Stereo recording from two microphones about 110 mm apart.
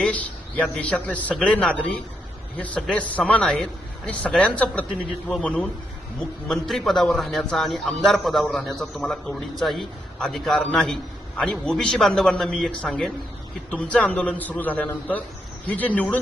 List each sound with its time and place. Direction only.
0.0 s a man's voice: 10° left (ahead or behind)